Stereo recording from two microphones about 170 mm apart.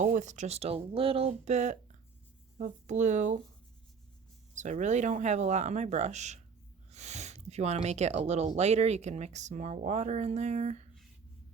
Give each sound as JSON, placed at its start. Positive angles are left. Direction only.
{"t": 0.0, "sound": "speech", "side_deg": -45}
{"t": 4.5, "sound": "speech", "side_deg": -45}